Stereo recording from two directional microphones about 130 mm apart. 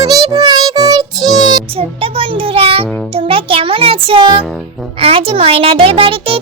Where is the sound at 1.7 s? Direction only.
45° right (ahead or behind).